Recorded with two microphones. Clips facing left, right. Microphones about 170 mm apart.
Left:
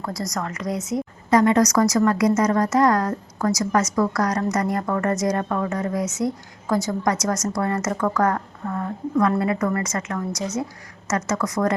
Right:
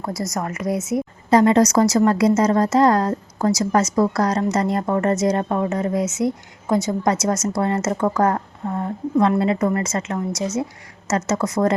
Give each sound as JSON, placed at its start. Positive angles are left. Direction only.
{"t": 0.0, "sound": "a woman's voice", "side_deg": -25}